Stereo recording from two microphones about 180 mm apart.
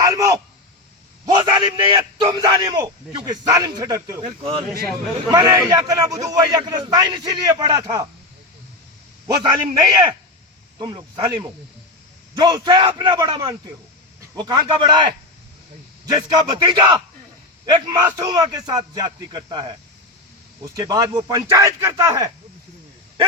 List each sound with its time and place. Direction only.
0.1 s a sound: 20° right (ahead or behind)
1.2 s a man's voice: 25° right (ahead or behind)
5.3 s a man's voice: 20° right (ahead or behind)
9.2 s a man's voice: 20° right (ahead or behind)
12.4 s a man's voice: 25° right (ahead or behind)
16.1 s a man's voice: 20° right (ahead or behind)
20.7 s a man's voice: 20° right (ahead or behind)